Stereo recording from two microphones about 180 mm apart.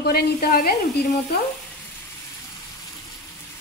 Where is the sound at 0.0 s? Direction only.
60° left (ahead or behind).